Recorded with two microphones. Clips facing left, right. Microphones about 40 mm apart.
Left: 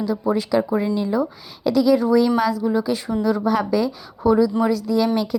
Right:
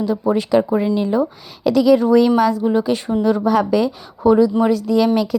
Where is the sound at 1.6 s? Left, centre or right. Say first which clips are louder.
Right 4 dB; right.